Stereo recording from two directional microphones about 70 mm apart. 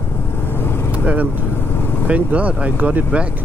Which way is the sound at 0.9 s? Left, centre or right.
Right.